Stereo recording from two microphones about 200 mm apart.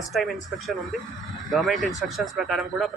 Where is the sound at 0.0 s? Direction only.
Centre (ahead or behind).